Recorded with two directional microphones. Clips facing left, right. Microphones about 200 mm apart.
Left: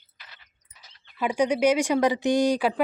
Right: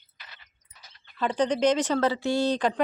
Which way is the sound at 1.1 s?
10° left (ahead or behind).